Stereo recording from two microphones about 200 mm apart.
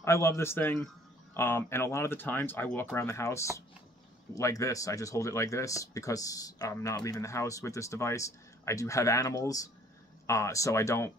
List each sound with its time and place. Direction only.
0.0 s speech: 15° left (ahead or behind)